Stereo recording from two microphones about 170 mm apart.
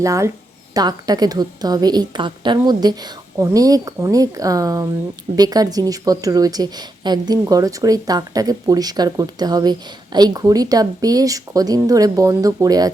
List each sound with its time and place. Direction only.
0.0 s speech: 20° right (ahead or behind)